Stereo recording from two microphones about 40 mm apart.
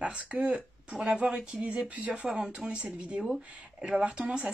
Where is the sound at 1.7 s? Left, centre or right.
Right.